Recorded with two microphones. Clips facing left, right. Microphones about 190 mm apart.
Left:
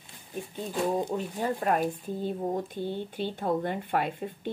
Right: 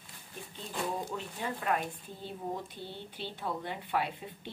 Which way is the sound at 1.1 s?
40° left (ahead or behind).